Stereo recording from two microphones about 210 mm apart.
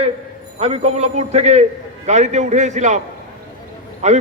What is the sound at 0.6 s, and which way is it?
A man's voice, 30° right (ahead or behind).